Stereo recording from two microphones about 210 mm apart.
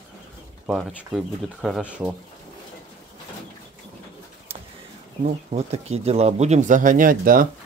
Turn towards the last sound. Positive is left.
turn(degrees=-40)  # may be behind; listen again after turning